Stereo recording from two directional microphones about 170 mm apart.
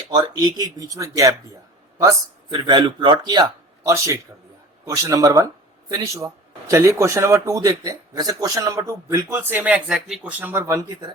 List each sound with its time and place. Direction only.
0.1 s speech: 25° right (ahead or behind)